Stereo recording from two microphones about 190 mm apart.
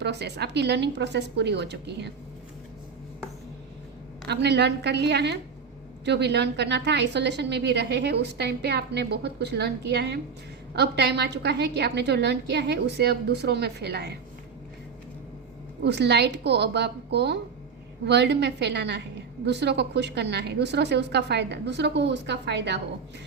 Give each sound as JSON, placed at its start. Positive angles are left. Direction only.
{"t": 0.0, "sound": "a woman's voice", "side_deg": -60}
{"t": 4.3, "sound": "a woman's voice", "side_deg": -60}
{"t": 15.8, "sound": "a woman's voice", "side_deg": -65}